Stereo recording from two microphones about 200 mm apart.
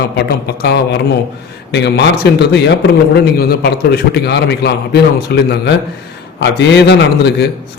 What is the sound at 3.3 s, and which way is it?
A man's voice, 50° left (ahead or behind).